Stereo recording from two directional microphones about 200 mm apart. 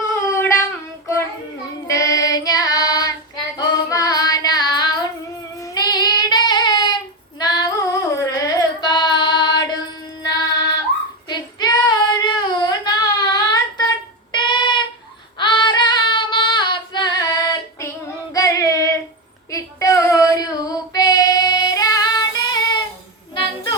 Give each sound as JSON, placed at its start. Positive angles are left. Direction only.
{"t": 0.1, "sound": "a sound", "side_deg": 10}
{"t": 1.9, "sound": "child singing", "side_deg": 15}
{"t": 7.3, "sound": "music", "side_deg": 20}
{"t": 11.3, "sound": "child singing", "side_deg": 20}
{"t": 14.3, "sound": "a sound", "side_deg": 25}
{"t": 15.4, "sound": "female singing", "side_deg": 25}
{"t": 18.3, "sound": "singing", "side_deg": 15}
{"t": 19.5, "sound": "child singing", "side_deg": 15}
{"t": 23.3, "sound": "a sound", "side_deg": 25}